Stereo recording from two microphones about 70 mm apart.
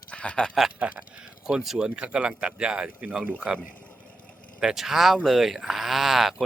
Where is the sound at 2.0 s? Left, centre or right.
Centre.